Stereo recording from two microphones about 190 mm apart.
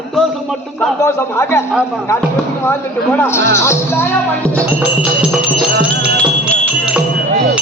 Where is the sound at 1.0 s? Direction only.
15° left (ahead or behind).